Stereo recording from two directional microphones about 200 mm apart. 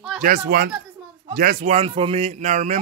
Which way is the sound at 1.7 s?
30° right (ahead or behind).